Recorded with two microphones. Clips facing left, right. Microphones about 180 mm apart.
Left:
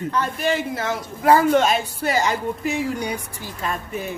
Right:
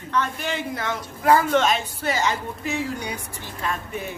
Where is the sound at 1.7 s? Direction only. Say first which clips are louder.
Left 3 dB; 10° left (ahead or behind).